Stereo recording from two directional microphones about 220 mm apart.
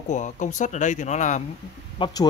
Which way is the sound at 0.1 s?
35° left (ahead or behind).